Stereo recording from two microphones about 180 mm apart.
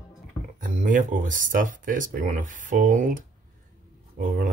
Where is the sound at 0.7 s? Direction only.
45° right (ahead or behind).